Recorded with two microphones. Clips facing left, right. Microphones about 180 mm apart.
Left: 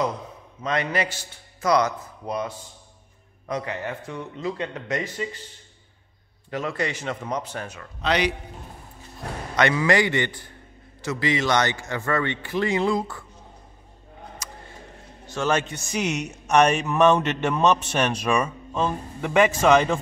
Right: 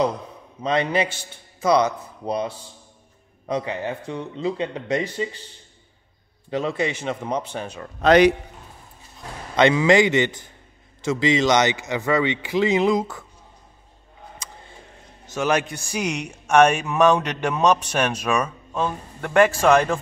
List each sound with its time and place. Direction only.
0.6 s a man's voice: 25° right (ahead or behind)
3.7 s a man's voice: 15° right (ahead or behind)
4.0 s speech: 30° right (ahead or behind)
6.5 s speech: 25° right (ahead or behind)
8.0 s a man's voice: 50° right (ahead or behind)
9.2 s a sound: 65° left (ahead or behind)
9.6 s speech: 20° right (ahead or behind)
15.3 s a man's voice: 15° right (ahead or behind)